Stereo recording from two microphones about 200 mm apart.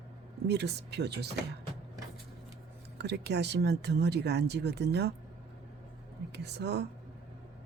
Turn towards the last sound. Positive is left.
turn(degrees=-55)  # may be behind; listen again after turning